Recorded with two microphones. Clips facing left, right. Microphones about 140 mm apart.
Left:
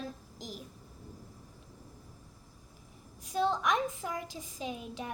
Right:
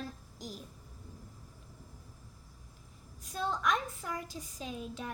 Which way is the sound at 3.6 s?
15° left (ahead or behind).